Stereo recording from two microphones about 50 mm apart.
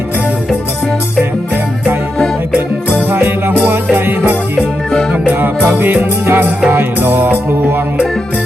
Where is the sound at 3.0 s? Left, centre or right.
Right.